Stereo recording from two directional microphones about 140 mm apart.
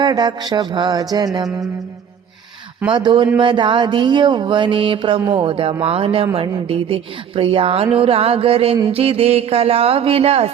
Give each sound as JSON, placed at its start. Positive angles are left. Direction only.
{"t": 0.0, "sound": "mantra", "side_deg": -30}
{"t": 1.1, "sound": "music", "side_deg": -30}
{"t": 2.9, "sound": "mantra", "side_deg": -35}
{"t": 6.7, "sound": "speech", "side_deg": -40}